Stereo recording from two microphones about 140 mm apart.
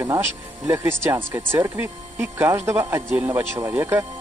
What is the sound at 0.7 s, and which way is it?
Speech, 20° right (ahead or behind).